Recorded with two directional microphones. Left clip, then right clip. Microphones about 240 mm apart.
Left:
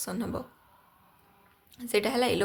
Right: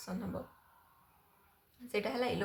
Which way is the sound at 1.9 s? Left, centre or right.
Left.